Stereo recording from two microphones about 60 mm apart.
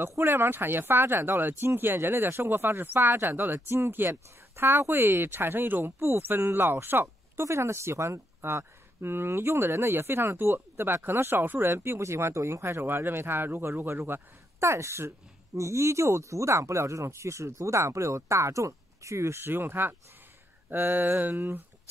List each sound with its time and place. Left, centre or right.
0.3 s speech: right
5.9 s speech: right
6.2 s speech: right
14.6 s speech: right